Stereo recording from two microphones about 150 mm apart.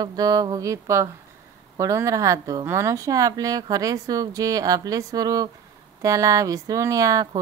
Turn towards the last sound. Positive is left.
turn(degrees=-25)  # may be behind; listen again after turning